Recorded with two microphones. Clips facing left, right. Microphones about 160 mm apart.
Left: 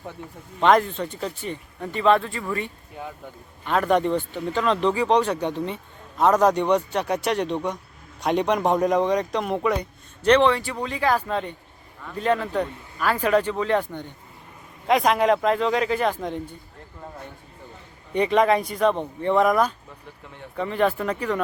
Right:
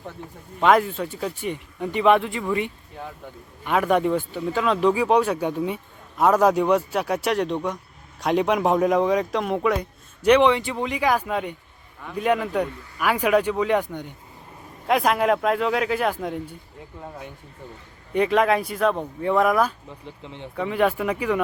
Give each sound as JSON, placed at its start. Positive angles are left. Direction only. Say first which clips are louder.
{"t": 0.6, "sound": "speech", "louder": "even", "side_deg": -5}
{"t": 10.2, "sound": "speech", "louder": "right 1 dB", "side_deg": -15}
{"t": 18.1, "sound": "speech", "louder": "even", "side_deg": 0}
{"t": 20.2, "sound": "speech", "louder": "right 4 dB", "side_deg": -20}
{"t": 20.6, "sound": "speech", "louder": "right 1 dB", "side_deg": -5}